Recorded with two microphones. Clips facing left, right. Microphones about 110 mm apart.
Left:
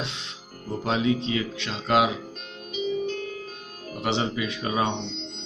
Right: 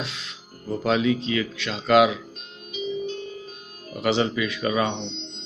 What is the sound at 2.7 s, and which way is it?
Music, 50° left (ahead or behind).